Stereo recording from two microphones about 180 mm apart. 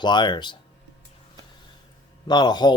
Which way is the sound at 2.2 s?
25° left (ahead or behind).